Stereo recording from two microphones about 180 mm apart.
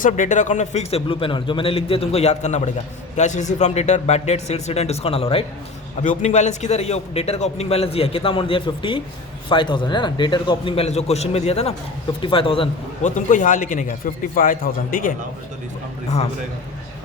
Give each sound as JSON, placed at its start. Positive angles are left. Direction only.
{"t": 0.0, "sound": "a man's voice", "side_deg": 45}
{"t": 13.1, "sound": "a man's voice", "side_deg": 45}